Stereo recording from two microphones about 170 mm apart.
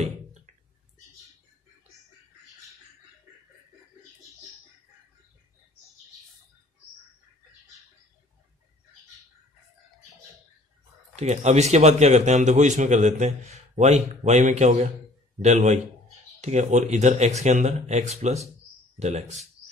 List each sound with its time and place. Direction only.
11.1 s a man's voice: 40° right (ahead or behind)